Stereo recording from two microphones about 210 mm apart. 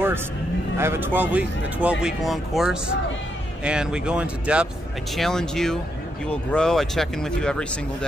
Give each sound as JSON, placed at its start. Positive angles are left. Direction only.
{"t": 0.7, "sound": "speech", "side_deg": -10}